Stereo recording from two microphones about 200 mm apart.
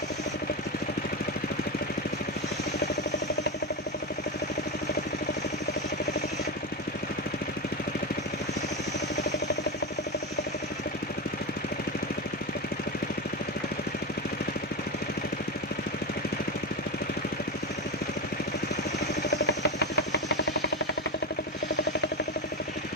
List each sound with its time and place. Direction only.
19.3 s engine: 60° left (ahead or behind)